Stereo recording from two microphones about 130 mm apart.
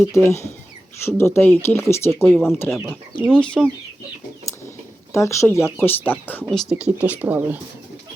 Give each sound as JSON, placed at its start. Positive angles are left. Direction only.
{"t": 0.0, "sound": "speech", "side_deg": 20}
{"t": 2.2, "sound": "speech", "side_deg": 5}
{"t": 3.2, "sound": "speech", "side_deg": 5}
{"t": 5.1, "sound": "speech", "side_deg": 20}
{"t": 6.5, "sound": "speech", "side_deg": 0}